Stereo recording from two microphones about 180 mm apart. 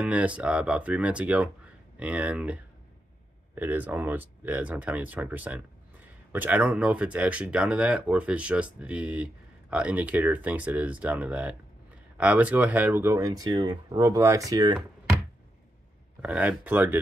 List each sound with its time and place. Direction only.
0.0 s speech: 5° right (ahead or behind)
16.2 s speech: 10° right (ahead or behind)